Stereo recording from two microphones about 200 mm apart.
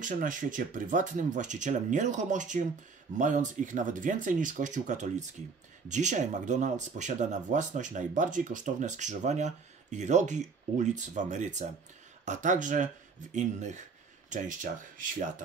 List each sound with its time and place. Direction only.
0.0 s speech: 40° right (ahead or behind)